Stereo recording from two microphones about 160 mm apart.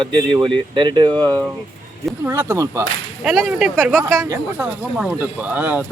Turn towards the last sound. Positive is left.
turn(degrees=-10)  # may be behind; listen again after turning